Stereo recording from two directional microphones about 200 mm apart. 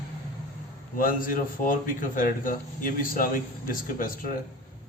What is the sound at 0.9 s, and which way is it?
A man's voice, 45° left (ahead or behind).